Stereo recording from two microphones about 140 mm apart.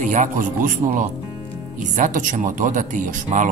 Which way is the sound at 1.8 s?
60° right (ahead or behind).